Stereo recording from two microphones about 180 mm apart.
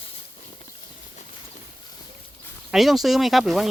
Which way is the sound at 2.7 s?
Centre (ahead or behind).